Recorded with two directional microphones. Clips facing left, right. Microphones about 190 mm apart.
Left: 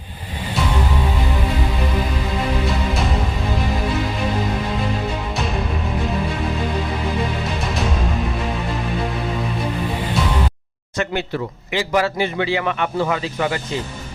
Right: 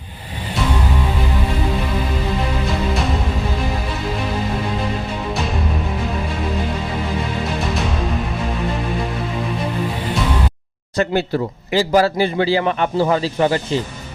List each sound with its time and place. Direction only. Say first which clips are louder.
10.9 s a man's voice: right 5 dB; 35° right (ahead or behind)